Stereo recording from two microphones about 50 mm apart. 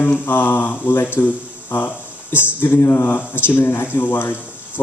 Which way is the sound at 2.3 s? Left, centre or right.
Left.